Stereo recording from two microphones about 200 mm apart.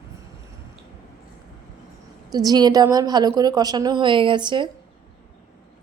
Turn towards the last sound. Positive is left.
turn(degrees=-25)  # may be behind; listen again after turning